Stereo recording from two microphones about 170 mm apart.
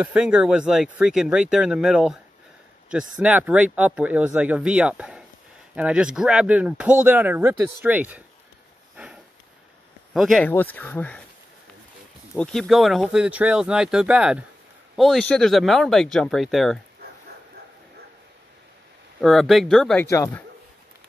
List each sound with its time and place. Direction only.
0.0 s speech: 5° right (ahead or behind)
8.9 s sniff: 5° right (ahead or behind)
10.1 s speech: centre (ahead or behind)
10.4 s speech: 10° left (ahead or behind)
12.4 s speech: 5° left (ahead or behind)
19.2 s speech: centre (ahead or behind)
20.1 s speech: 15° left (ahead or behind)